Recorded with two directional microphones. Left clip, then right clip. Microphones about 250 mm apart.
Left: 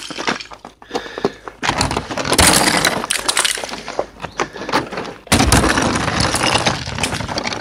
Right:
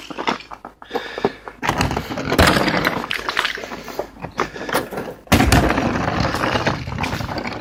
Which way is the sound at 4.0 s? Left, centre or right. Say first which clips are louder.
Left 5 dB; centre.